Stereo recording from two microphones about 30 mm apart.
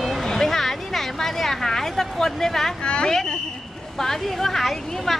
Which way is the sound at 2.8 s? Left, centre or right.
Left.